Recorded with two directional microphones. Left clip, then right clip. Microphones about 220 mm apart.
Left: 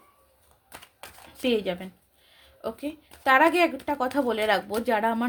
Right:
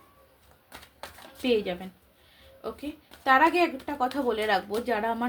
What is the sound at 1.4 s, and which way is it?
Speech, 50° left (ahead or behind).